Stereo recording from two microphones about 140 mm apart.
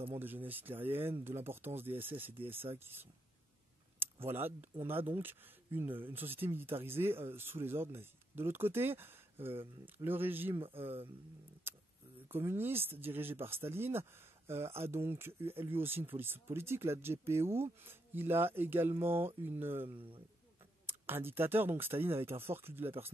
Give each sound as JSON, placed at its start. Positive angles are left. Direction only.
{"t": 0.2, "sound": "speech", "side_deg": -15}
{"t": 10.7, "sound": "speech", "side_deg": -40}
{"t": 12.3, "sound": "speech", "side_deg": -15}